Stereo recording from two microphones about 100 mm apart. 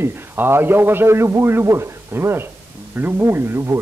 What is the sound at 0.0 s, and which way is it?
A man's voice, 25° right (ahead or behind).